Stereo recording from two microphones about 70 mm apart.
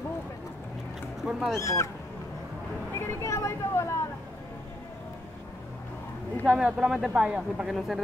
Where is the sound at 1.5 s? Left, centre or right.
Left.